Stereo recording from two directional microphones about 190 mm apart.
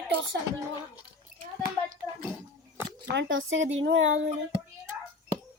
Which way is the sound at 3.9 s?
90° right.